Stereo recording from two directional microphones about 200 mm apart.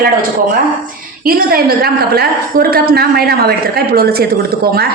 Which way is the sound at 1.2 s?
50° right (ahead or behind).